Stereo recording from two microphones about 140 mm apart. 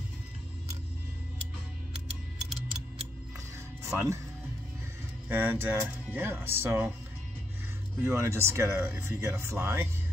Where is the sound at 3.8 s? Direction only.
20° right (ahead or behind).